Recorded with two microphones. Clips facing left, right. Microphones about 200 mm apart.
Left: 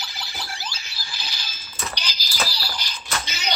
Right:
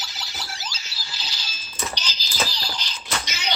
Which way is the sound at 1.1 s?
15° left (ahead or behind).